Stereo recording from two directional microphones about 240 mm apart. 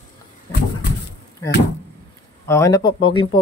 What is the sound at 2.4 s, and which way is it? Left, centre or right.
Speech, centre.